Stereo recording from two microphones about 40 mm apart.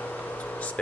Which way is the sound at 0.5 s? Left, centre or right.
Left.